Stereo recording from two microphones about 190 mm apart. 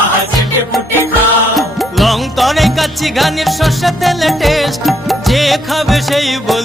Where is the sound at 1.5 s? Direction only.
Centre (ahead or behind).